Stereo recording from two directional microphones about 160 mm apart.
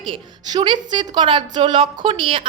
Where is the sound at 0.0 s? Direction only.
30° right (ahead or behind).